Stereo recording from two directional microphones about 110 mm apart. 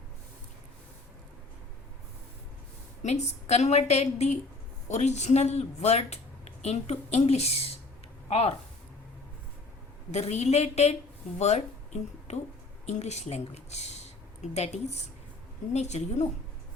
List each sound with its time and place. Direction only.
3.0 s speech: 85° left
10.1 s speech: 90° left
11.3 s speech: 90° left